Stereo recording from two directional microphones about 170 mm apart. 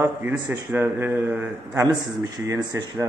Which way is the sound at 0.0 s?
10° right (ahead or behind).